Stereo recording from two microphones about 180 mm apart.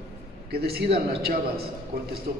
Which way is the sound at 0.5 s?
60° right (ahead or behind).